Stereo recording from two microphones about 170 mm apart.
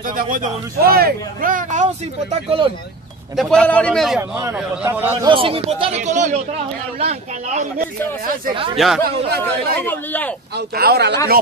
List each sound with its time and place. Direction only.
0.0 s speech: 50° right (ahead or behind)
3.3 s a man's voice: centre (ahead or behind)
4.2 s a man's voice: 15° right (ahead or behind)
5.2 s speech: 30° right (ahead or behind)
8.2 s speech: 55° right (ahead or behind)
8.7 s a man's voice: centre (ahead or behind)
9.4 s speech: 10° left (ahead or behind)
10.5 s speech: 65° right (ahead or behind)